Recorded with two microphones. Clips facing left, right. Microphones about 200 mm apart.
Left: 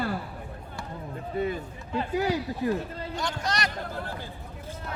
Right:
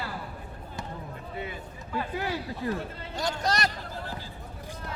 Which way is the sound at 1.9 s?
20° left (ahead or behind).